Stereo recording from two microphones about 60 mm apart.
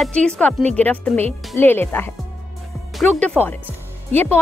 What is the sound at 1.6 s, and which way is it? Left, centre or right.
Speech, left.